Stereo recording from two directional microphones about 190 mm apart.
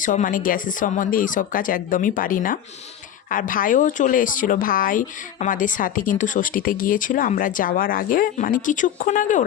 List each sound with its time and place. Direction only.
0.0 s speech: 45° left (ahead or behind)